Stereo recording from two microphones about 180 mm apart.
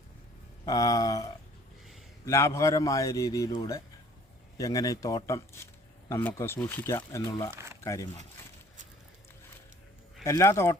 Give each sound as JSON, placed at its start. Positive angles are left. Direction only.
{"t": 0.6, "sound": "speech", "side_deg": 20}
{"t": 7.5, "sound": "speech", "side_deg": -15}
{"t": 10.2, "sound": "speech", "side_deg": 15}